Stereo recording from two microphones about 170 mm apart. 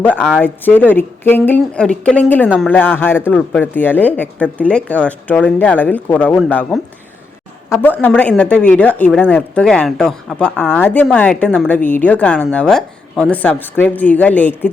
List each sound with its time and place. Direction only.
0.3 s speech: 10° left (ahead or behind)